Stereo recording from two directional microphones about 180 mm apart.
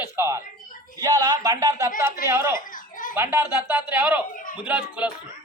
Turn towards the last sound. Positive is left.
turn(degrees=-10)  # may be behind; listen again after turning